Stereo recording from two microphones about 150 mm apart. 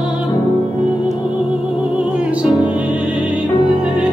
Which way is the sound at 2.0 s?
5° right (ahead or behind).